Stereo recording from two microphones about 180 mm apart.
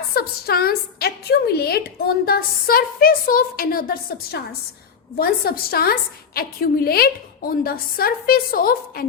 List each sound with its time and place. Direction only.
0.1 s a woman's voice: 60° left (ahead or behind)